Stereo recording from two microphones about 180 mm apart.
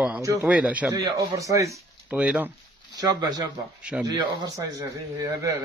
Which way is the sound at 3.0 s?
20° right (ahead or behind).